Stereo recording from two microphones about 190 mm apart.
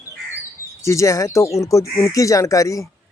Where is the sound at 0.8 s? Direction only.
15° left (ahead or behind).